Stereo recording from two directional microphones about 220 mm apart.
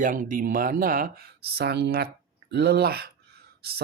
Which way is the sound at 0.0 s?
35° right (ahead or behind).